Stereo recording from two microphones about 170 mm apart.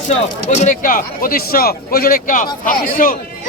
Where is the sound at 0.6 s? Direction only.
50° left (ahead or behind).